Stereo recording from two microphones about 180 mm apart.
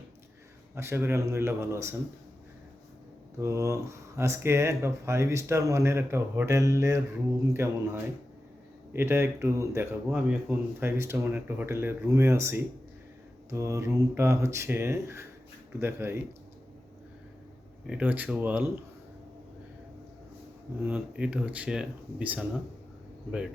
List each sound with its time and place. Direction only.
0.8 s speech: 15° right (ahead or behind)
3.3 s speech: 15° right (ahead or behind)
17.8 s speech: 5° right (ahead or behind)
20.8 s speech: 5° right (ahead or behind)